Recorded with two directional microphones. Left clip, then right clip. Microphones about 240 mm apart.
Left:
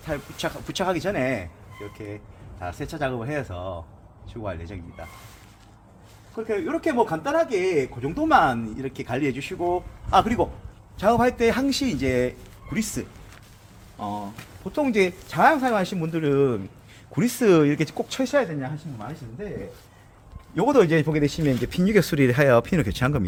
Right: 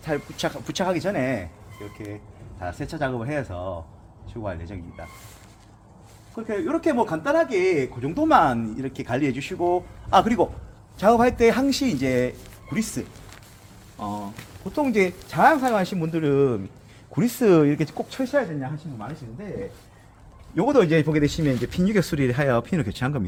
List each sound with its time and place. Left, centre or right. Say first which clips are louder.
0.0 s speech: right 2 dB; right; by 1.5 s centre
2.6 s speech: right 1 dB; centre
6.3 s speech: even; centre
12.7 s speech: even; centre
17.9 s speech: left 1 dB; left
20.6 s speech: even; left
21.1 s speech: right 1 dB; centre; by 23.2 s left